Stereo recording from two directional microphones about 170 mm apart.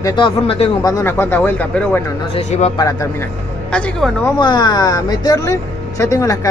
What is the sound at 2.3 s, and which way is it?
Speech, 40° left (ahead or behind).